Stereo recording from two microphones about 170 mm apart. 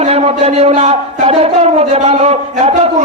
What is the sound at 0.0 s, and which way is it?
Speech, 40° right (ahead or behind).